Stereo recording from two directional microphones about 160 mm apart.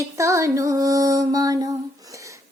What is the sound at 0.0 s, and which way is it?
Music, 20° right (ahead or behind).